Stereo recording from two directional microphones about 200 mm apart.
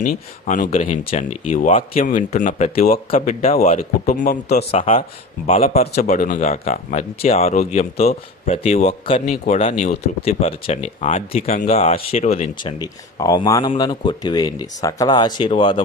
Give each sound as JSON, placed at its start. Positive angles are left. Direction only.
{"t": 0.4, "sound": "speech", "side_deg": 40}
{"t": 4.7, "sound": "speech", "side_deg": 30}
{"t": 12.8, "sound": "speech", "side_deg": 20}